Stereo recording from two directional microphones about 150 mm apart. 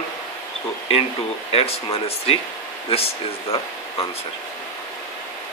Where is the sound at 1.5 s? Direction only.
40° left (ahead or behind).